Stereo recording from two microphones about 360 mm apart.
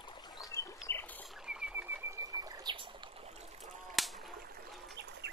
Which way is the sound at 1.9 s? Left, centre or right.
Centre.